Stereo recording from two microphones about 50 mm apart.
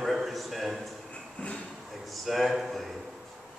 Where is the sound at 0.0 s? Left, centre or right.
Centre.